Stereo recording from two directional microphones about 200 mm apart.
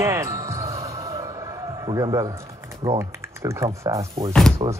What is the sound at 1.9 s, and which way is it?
Speech, 20° right (ahead or behind).